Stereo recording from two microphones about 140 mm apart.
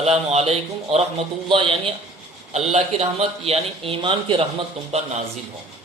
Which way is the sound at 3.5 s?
40° right (ahead or behind).